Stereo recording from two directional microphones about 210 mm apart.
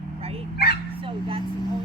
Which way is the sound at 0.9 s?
25° right (ahead or behind).